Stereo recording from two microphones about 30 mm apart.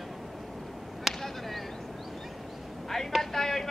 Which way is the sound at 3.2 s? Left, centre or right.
Centre.